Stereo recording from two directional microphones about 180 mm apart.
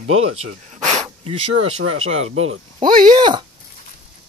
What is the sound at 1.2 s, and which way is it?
Speech, 35° right (ahead or behind).